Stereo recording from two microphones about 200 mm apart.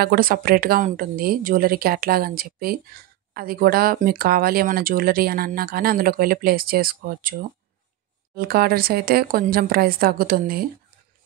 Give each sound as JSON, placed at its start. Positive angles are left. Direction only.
{"t": 0.0, "sound": "speech", "side_deg": -45}